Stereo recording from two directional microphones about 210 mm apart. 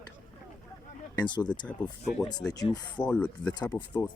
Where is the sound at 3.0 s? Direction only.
5° left (ahead or behind).